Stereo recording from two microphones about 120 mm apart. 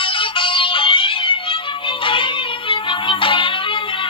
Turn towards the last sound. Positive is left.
turn(degrees=45)  # may be behind; listen again after turning